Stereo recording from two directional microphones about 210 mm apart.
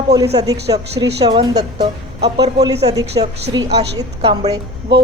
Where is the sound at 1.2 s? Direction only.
20° right (ahead or behind).